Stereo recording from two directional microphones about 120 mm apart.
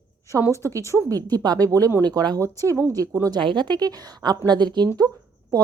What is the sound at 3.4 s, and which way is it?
A woman's voice, 40° right (ahead or behind).